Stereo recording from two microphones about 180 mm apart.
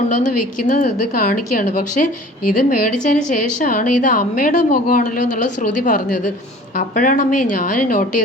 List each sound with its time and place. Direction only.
0.2 s a woman's voice: 45° left (ahead or behind)